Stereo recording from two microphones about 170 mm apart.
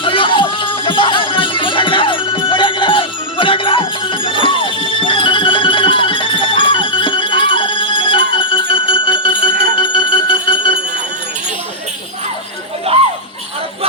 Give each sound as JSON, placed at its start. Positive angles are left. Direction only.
{"t": 0.0, "sound": "music", "side_deg": 30}